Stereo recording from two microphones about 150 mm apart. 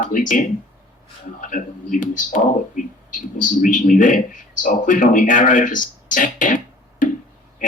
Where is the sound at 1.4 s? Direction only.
60° left (ahead or behind).